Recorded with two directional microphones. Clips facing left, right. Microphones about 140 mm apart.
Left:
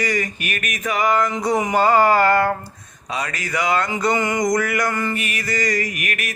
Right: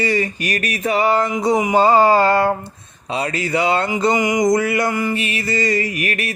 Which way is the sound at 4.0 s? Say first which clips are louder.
Right 3 dB; 20° right (ahead or behind).